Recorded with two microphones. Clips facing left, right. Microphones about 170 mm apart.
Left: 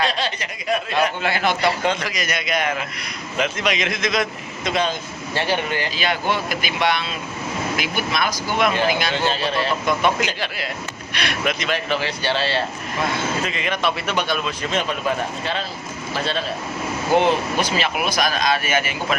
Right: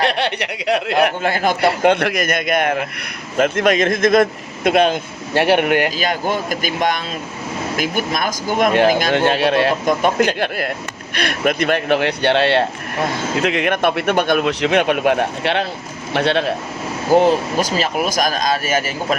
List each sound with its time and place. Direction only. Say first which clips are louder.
0.0 s speech: right 5 dB; 65° right (ahead or behind)
1.2 s a man's voice: right 4 dB; 45° right (ahead or behind); by 5.9 s 65° right (ahead or behind)
6.0 s a man's voice: right 3 dB; 45° right (ahead or behind); by 9.7 s 65° right (ahead or behind)
9.8 s a man's voice: right 5 dB; 50° right (ahead or behind); by 16.5 s 65° right (ahead or behind)
17.2 s speech: right 4 dB; 40° right (ahead or behind)